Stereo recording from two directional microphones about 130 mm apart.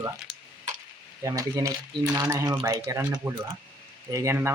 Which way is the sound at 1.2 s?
25° right (ahead or behind).